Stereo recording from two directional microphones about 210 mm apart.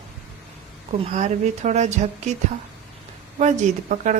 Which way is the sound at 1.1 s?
35° right (ahead or behind).